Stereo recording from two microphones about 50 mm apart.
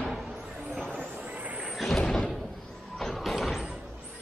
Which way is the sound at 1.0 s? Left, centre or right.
Right.